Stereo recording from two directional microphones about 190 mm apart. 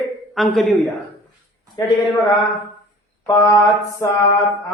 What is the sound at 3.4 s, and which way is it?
Mantra, 15° left (ahead or behind).